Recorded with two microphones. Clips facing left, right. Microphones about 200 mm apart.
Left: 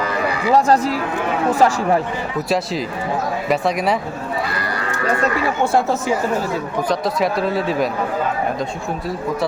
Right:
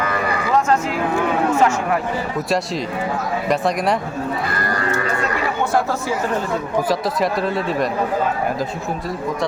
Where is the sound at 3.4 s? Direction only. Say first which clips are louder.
Even; centre (ahead or behind).